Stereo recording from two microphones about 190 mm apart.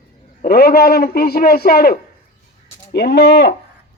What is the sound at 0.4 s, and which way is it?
A man's voice, 55° left (ahead or behind).